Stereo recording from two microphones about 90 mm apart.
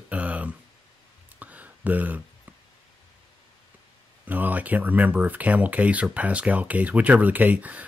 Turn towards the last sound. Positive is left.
turn(degrees=-15)  # may be behind; listen again after turning